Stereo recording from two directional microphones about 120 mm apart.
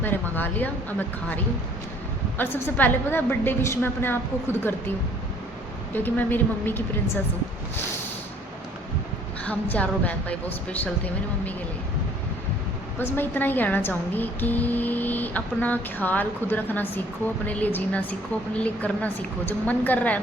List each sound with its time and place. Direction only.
0.0 s a woman's voice: 15° left (ahead or behind)
2.4 s a woman's voice: 15° left (ahead or behind)
5.9 s a woman's voice: 15° left (ahead or behind)
9.4 s a woman's voice: 10° left (ahead or behind)
13.0 s a woman's voice: 15° left (ahead or behind)